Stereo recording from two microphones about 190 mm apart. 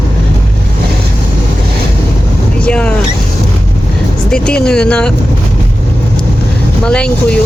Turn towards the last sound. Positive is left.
turn(degrees=5)  # may be behind; listen again after turning